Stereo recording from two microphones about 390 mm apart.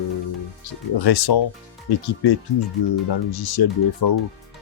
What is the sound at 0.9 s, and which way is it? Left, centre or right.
Speech, left.